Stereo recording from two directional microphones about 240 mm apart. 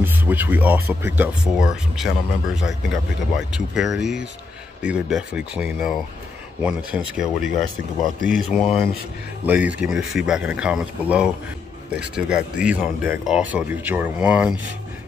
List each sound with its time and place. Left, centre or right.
0.0 s speech: centre